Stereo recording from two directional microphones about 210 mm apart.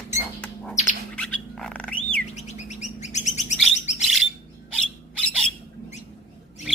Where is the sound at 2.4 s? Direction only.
35° left (ahead or behind).